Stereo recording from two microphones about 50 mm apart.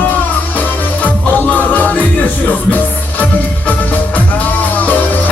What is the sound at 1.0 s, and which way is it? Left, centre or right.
Music, left.